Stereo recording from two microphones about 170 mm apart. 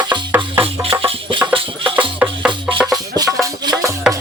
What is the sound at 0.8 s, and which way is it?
Music, 35° right (ahead or behind).